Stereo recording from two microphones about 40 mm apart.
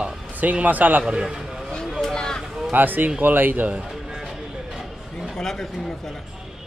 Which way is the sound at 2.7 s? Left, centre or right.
Right.